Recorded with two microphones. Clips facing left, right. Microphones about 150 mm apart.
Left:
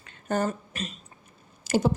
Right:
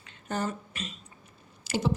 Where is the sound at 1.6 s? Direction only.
45° left (ahead or behind).